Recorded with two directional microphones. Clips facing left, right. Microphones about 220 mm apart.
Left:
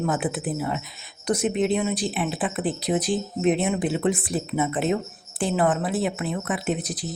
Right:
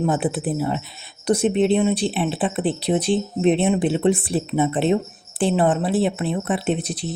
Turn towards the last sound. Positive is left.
turn(degrees=-25)  # may be behind; listen again after turning